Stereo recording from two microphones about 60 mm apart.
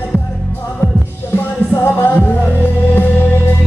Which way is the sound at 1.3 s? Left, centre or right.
Left.